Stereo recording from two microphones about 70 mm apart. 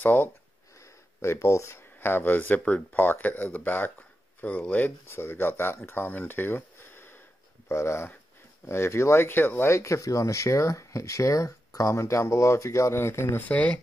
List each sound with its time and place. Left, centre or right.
0.0 s speech: left
1.2 s speech: left
2.0 s speech: left
9.7 s speech: left
13.5 s speech: left